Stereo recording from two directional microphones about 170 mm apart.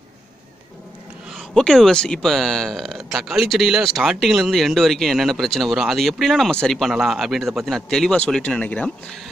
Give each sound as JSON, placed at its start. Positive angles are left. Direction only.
{"t": 1.3, "sound": "speech", "side_deg": 5}